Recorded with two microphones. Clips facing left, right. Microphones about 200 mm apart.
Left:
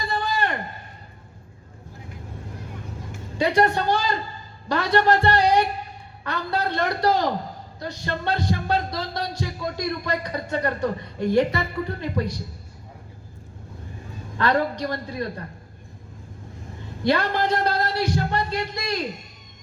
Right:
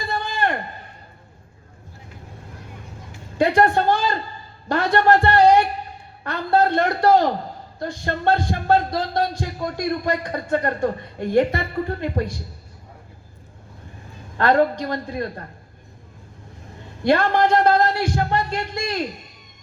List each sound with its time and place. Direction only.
0.1 s a sound: 50° right (ahead or behind)
3.3 s music: 50° right (ahead or behind)
14.3 s music: 50° right (ahead or behind)
17.0 s music: 50° right (ahead or behind)